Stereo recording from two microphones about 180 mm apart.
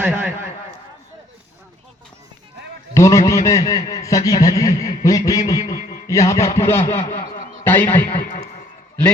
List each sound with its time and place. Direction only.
0.0 s a man's voice: 5° right (ahead or behind)
2.9 s a man's voice: 15° left (ahead or behind)
7.2 s a sound: 50° left (ahead or behind)
7.6 s a man's voice: 10° left (ahead or behind)